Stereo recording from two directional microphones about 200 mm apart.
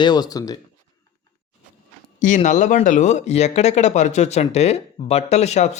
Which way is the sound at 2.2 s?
40° left (ahead or behind).